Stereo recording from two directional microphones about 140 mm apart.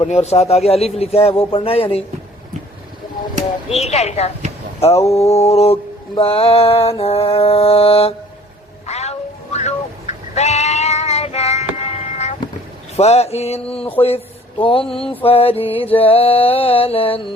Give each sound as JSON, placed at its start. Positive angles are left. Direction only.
{"t": 0.0, "sound": "mantra", "side_deg": 50}
{"t": 3.7, "sound": "mantra", "side_deg": 50}
{"t": 8.9, "sound": "bleat", "side_deg": 50}
{"t": 13.0, "sound": "mantra", "side_deg": 50}
{"t": 14.6, "sound": "a sound", "side_deg": 40}
{"t": 15.2, "sound": "mantra", "side_deg": 45}